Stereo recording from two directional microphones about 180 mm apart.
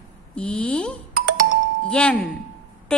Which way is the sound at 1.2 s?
55° right (ahead or behind).